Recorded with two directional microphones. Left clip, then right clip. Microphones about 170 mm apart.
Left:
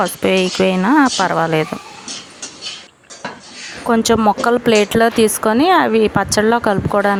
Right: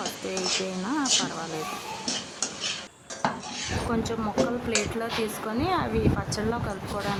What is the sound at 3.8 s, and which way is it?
Speech, 50° left (ahead or behind).